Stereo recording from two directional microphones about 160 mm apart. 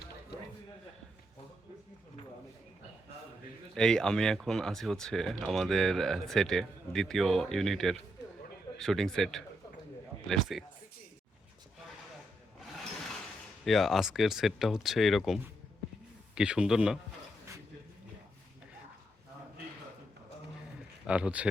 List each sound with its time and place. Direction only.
3.8 s speech: 5° left (ahead or behind)
12.5 s wood: centre (ahead or behind)
13.7 s speech: centre (ahead or behind)
21.1 s speech: 5° right (ahead or behind)